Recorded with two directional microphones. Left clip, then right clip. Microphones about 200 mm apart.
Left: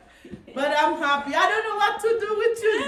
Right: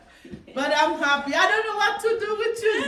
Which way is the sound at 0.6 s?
10° left (ahead or behind).